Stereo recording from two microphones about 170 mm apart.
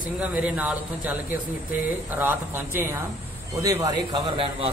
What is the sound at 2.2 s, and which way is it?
A man's voice, 10° right (ahead or behind).